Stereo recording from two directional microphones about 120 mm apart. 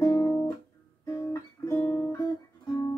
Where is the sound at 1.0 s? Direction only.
25° left (ahead or behind).